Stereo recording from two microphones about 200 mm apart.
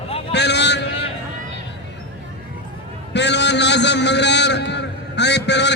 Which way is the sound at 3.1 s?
60° left (ahead or behind).